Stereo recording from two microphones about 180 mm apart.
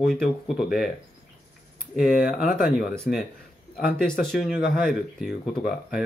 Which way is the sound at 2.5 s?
50° left (ahead or behind).